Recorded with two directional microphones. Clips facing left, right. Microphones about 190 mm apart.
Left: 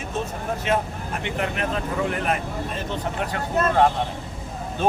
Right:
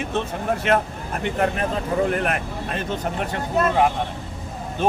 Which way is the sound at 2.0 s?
60° right (ahead or behind).